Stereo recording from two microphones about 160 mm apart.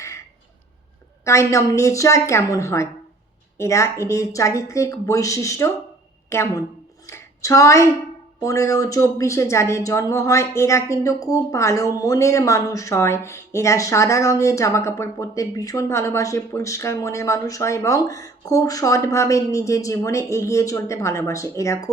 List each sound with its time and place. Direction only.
1.2 s a woman's voice: 20° left (ahead or behind)
7.1 s a sound: 20° left (ahead or behind)
8.4 s speech: 20° left (ahead or behind)